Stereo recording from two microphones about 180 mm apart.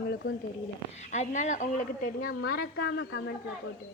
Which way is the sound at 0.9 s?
40° left (ahead or behind).